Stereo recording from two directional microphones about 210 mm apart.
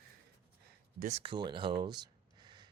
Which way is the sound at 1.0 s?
30° right (ahead or behind).